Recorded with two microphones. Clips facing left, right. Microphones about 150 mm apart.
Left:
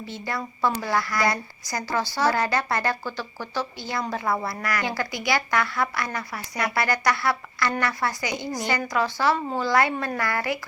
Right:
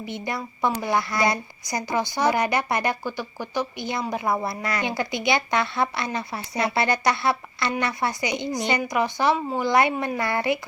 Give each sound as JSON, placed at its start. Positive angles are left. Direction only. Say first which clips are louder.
{"t": 0.0, "sound": "speech", "louder": "right 1 dB", "side_deg": -20}